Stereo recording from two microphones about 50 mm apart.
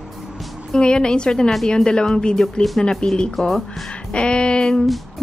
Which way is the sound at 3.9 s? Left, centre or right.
Left.